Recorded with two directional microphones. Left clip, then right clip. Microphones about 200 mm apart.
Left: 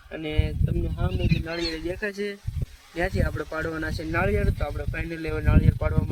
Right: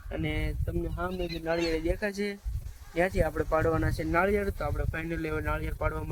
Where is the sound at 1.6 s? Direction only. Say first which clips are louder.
Even; 60° right (ahead or behind).